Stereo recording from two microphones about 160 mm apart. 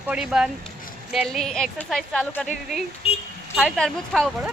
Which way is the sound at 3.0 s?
40° left (ahead or behind).